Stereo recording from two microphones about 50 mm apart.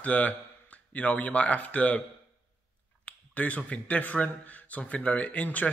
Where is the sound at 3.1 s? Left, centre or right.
Left.